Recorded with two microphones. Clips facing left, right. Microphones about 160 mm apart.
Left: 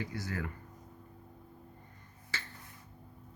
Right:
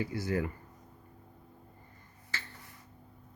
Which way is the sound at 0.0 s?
10° right (ahead or behind).